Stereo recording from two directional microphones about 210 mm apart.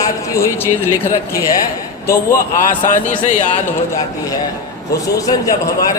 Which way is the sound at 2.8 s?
35° left (ahead or behind).